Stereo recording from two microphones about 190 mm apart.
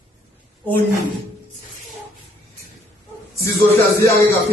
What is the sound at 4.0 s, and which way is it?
Speech, 15° left (ahead or behind).